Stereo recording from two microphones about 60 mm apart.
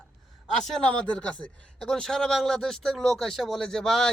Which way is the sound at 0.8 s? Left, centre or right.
Centre.